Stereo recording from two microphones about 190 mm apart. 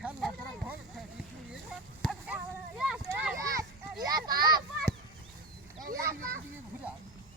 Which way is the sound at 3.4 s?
20° right (ahead or behind).